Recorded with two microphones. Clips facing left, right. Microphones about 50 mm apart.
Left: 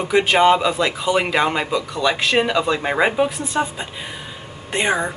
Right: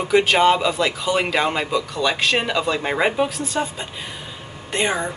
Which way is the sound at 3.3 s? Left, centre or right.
Centre.